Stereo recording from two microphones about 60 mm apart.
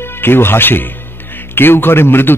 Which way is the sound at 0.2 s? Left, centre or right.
Left.